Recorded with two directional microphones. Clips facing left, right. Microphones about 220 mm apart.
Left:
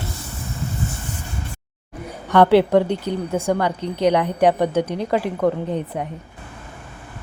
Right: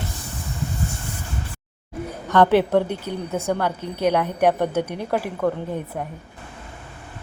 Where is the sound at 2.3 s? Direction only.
10° left (ahead or behind).